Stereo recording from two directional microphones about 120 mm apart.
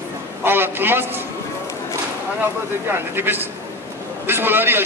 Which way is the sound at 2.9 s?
15° right (ahead or behind).